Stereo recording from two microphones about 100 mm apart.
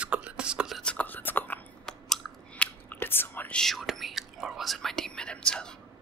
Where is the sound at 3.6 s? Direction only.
Centre (ahead or behind).